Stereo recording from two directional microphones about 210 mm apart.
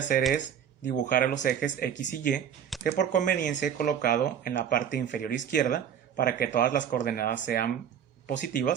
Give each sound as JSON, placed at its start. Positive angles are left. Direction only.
{"t": 0.9, "sound": "speech", "side_deg": 40}